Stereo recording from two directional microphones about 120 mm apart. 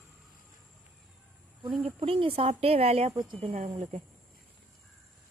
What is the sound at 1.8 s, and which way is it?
Speech, 50° right (ahead or behind).